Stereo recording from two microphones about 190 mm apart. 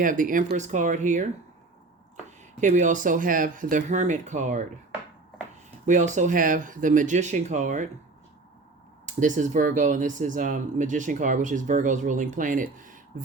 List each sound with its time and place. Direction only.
0.0 s speech: 45° right (ahead or behind)
2.6 s speech: 40° right (ahead or behind)
5.8 s speech: 40° right (ahead or behind)
9.0 s speech: 40° right (ahead or behind)